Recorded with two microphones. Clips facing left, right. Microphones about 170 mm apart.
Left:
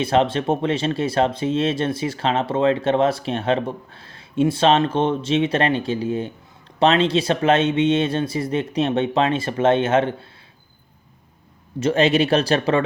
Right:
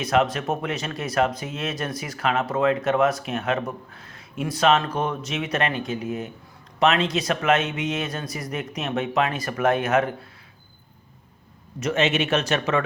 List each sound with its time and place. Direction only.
0.0 s speech: 30° left (ahead or behind)
11.8 s speech: 30° left (ahead or behind)